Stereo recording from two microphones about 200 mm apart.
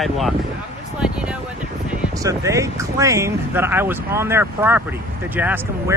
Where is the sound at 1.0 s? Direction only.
5° right (ahead or behind).